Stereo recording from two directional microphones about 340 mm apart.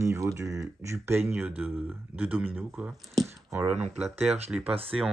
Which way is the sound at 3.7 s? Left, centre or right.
Centre.